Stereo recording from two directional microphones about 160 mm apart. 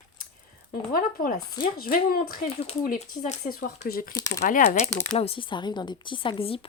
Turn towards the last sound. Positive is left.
turn(degrees=35)  # may be behind; listen again after turning